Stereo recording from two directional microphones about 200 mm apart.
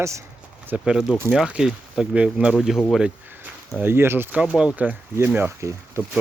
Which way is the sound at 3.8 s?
10° right (ahead or behind).